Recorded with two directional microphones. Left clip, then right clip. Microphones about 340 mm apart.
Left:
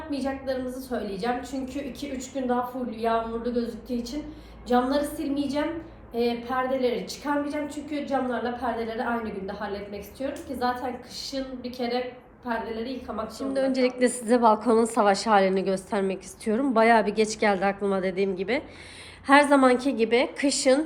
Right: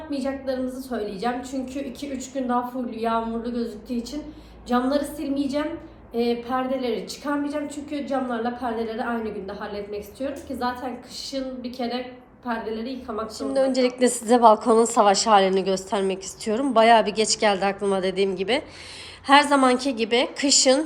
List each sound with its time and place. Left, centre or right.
0.1 s a woman's voice: centre